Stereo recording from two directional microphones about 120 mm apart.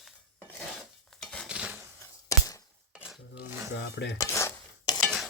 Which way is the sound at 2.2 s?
30° left (ahead or behind).